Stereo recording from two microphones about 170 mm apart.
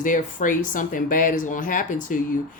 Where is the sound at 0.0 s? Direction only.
50° left (ahead or behind).